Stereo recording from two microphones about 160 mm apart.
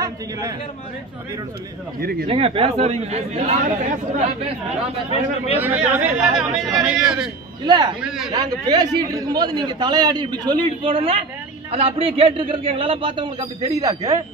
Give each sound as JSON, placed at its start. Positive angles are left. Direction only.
{"t": 0.0, "sound": "a man's voice", "side_deg": -20}
{"t": 2.0, "sound": "speech", "side_deg": -70}
{"t": 2.2, "sound": "a man's voice", "side_deg": -35}
{"t": 5.6, "sound": "speech", "side_deg": -10}
{"t": 7.6, "sound": "a man's voice", "side_deg": -25}